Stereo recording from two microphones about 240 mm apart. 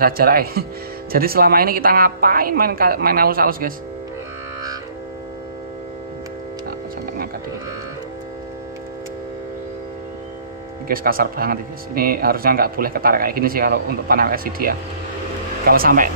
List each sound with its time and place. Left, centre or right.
0.0 s speech: right
10.9 s speech: right